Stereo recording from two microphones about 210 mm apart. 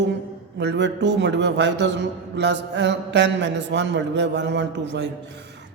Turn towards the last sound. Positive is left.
turn(degrees=-55)  # may be behind; listen again after turning